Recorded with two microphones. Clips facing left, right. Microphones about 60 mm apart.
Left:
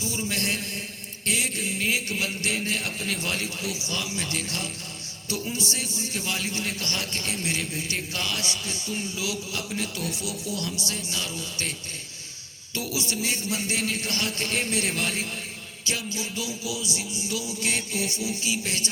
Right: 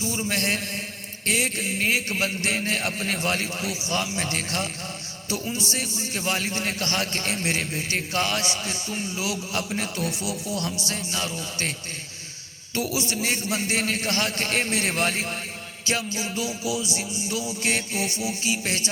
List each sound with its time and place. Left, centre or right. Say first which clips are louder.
0.3 s a man's voice: right 3 dB; right
1.2 s music: right 3 dB; right
3.2 s a man's voice: right 4 dB; right
3.9 s music: right 6 dB; right
5.7 s music: right 2 dB; right
10.2 s a man's voice: right 3 dB; right
10.6 s music: right 2 dB; right
12.7 s music: right 3 dB; right
13.7 s a man's voice: right 3 dB; right
15.9 s music: right 4 dB; right